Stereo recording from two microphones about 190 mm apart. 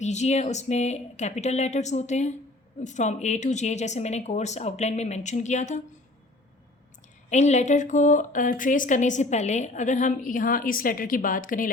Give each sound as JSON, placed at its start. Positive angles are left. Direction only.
{"t": 0.0, "sound": "speech", "side_deg": 35}
{"t": 7.3, "sound": "speech", "side_deg": 35}